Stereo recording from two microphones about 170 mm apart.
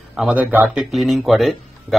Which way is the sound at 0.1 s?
5° right (ahead or behind).